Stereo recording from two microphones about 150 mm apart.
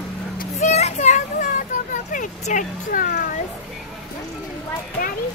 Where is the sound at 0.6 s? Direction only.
50° left (ahead or behind); by 3.2 s 65° left (ahead or behind).